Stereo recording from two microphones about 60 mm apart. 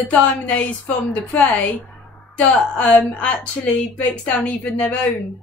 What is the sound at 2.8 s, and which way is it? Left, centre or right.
Speech, left.